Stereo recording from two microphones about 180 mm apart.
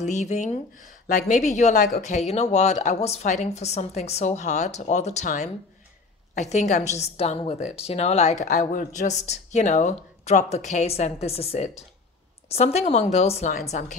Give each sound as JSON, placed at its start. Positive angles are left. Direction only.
{"t": 0.0, "sound": "speech", "side_deg": 40}